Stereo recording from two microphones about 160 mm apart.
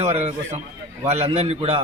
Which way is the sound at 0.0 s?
40° right (ahead or behind).